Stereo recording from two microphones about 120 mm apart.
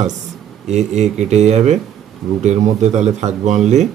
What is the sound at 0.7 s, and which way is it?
Speech, 70° right (ahead or behind).